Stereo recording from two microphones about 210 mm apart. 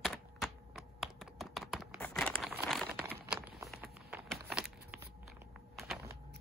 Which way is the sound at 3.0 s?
5° right (ahead or behind).